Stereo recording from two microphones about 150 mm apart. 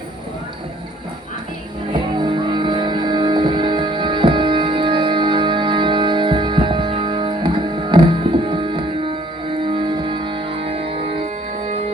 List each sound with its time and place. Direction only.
1.9 s music: 30° right (ahead or behind)